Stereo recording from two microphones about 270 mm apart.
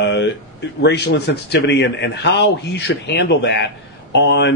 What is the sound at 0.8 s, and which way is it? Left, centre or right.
Speech, left.